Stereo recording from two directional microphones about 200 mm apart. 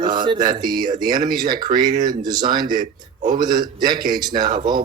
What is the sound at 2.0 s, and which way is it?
Speech, 40° right (ahead or behind).